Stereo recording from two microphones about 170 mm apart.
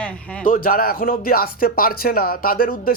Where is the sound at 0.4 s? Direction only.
55° left (ahead or behind).